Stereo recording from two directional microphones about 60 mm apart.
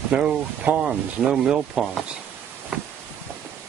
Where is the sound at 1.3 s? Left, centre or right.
Centre.